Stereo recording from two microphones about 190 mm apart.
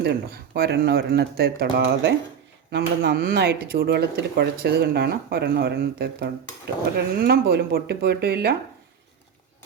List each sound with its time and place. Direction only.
0.0 s speech: 60° right (ahead or behind)